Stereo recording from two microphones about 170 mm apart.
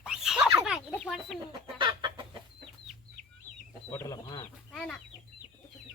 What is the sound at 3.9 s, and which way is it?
Speech, 15° left (ahead or behind).